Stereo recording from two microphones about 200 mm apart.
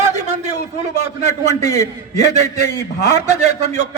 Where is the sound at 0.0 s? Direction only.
35° right (ahead or behind).